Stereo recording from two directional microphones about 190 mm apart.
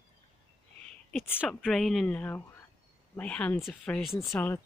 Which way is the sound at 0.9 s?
5° left (ahead or behind).